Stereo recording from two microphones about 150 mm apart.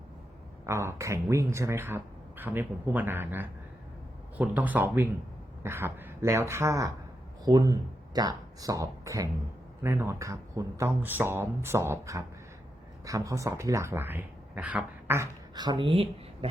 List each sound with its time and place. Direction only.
0.6 s speech: 20° right (ahead or behind)
15.5 s speech: 30° right (ahead or behind)